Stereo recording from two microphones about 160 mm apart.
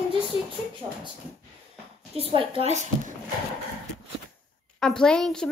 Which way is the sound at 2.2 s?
35° right (ahead or behind).